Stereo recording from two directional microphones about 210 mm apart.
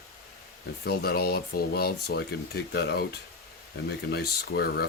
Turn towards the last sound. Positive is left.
turn(degrees=50)  # may be behind; listen again after turning